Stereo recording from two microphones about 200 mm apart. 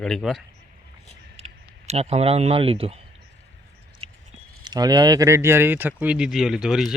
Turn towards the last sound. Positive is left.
turn(degrees=0)  # may be behind; listen again after turning